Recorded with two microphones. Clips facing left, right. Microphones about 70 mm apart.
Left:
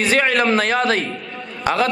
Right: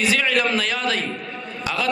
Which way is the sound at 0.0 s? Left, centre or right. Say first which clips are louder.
Left 3 dB; left.